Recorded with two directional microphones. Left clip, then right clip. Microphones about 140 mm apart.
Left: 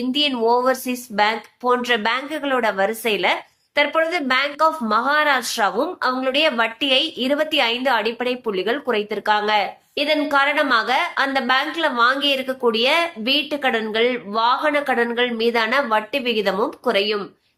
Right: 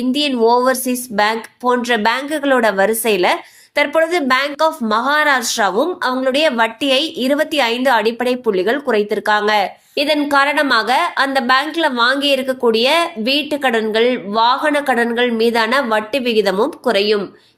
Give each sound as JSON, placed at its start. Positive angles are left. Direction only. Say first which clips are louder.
{"t": 0.1, "sound": "a woman's voice", "louder": "right 4 dB", "side_deg": -35}